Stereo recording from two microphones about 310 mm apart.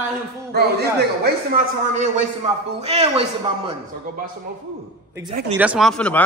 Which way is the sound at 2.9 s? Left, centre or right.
Centre.